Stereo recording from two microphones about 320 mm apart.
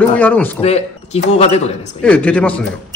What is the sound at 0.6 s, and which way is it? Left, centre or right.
Speech, centre.